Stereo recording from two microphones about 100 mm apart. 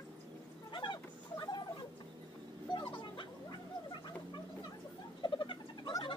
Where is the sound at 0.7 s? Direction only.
50° left (ahead or behind).